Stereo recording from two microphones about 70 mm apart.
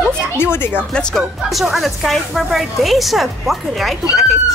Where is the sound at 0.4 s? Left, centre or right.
Left.